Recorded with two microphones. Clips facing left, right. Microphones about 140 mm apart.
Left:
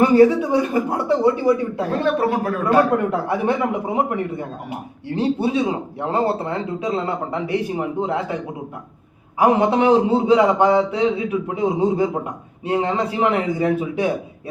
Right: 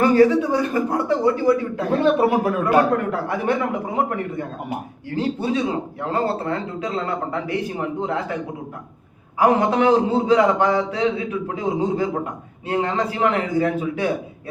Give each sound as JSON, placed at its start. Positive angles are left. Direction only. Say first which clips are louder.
{"t": 0.0, "sound": "speech", "louder": "left 2 dB", "side_deg": 20}
{"t": 2.1, "sound": "speech", "louder": "right 2 dB", "side_deg": -15}
{"t": 3.1, "sound": "speech", "louder": "left 2 dB", "side_deg": 25}
{"t": 9.4, "sound": "speech", "louder": "left 1 dB", "side_deg": 20}